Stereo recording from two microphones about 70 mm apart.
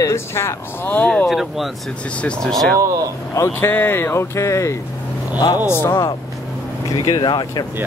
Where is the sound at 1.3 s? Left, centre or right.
Centre.